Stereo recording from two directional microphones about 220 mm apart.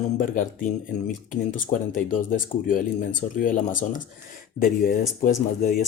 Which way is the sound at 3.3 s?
40° left (ahead or behind).